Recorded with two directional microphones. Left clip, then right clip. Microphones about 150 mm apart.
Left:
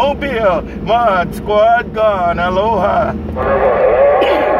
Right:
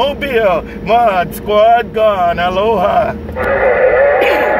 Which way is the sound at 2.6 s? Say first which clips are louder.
Even; 15° right (ahead or behind).